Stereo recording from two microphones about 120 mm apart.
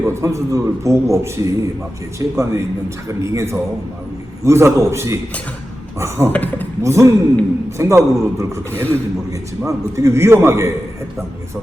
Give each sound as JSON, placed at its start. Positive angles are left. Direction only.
{"t": 0.0, "sound": "a man's voice", "side_deg": -25}
{"t": 6.3, "sound": "speech", "side_deg": 15}
{"t": 6.8, "sound": "a man's voice", "side_deg": -25}